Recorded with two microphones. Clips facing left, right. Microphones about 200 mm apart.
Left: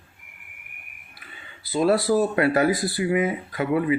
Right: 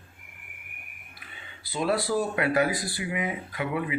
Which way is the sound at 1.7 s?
40° left (ahead or behind).